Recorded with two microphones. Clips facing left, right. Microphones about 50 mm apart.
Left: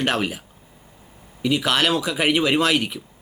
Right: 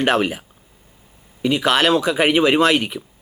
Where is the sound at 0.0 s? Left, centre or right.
Centre.